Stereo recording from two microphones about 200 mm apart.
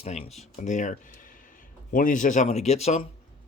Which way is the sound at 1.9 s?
40° left (ahead or behind).